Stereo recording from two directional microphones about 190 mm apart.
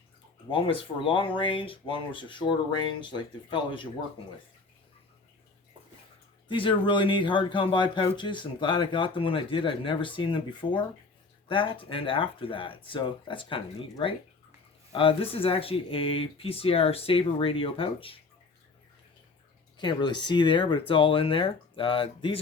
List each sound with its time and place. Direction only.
0.5 s speech: 25° left (ahead or behind)
6.5 s speech: 25° left (ahead or behind)
19.8 s speech: 25° left (ahead or behind)